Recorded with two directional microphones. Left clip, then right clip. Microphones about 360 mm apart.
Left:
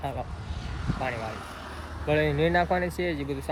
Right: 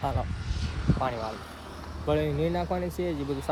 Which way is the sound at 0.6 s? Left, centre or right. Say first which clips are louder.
Right 2 dB; left.